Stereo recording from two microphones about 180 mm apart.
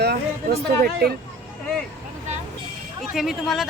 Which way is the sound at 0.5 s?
60° right (ahead or behind).